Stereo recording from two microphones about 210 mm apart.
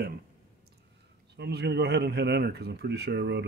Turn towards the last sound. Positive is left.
turn(degrees=-55)  # may be behind; listen again after turning